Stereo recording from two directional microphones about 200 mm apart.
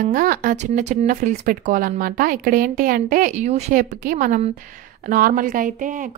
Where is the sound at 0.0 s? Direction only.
45° right (ahead or behind).